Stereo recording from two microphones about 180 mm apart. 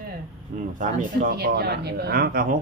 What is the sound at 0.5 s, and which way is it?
Speech, 50° right (ahead or behind).